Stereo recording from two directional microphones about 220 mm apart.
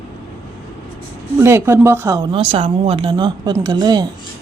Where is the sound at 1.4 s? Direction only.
10° right (ahead or behind).